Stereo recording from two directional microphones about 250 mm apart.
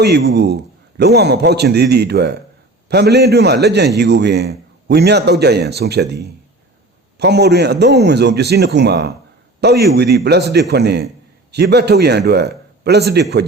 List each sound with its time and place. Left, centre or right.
0.0 s a man's voice: right